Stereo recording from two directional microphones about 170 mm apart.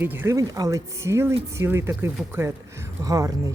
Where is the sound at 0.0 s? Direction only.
10° right (ahead or behind).